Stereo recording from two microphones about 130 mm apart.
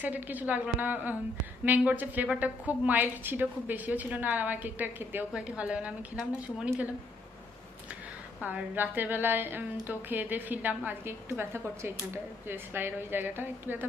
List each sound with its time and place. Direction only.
0.0 s a woman's voice: 10° right (ahead or behind)
8.4 s a woman's voice: 10° right (ahead or behind)